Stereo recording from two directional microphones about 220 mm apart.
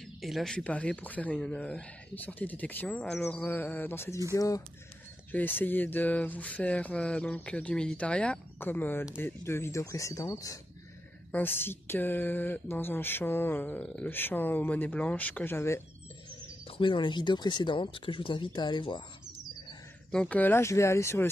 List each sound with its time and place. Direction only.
0.0 s speech: centre (ahead or behind)
16.6 s speech: 25° left (ahead or behind)
20.1 s speech: 5° left (ahead or behind)